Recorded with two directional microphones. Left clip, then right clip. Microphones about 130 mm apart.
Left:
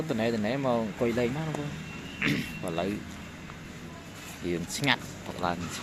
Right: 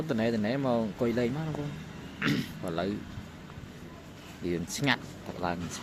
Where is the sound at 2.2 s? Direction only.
55° right (ahead or behind).